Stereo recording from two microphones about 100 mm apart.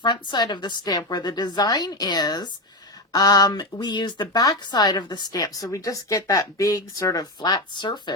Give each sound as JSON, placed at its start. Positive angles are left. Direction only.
{"t": 0.0, "sound": "a woman's voice", "side_deg": 50}